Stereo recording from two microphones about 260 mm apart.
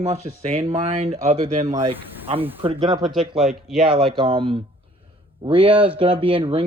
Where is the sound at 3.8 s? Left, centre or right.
Right.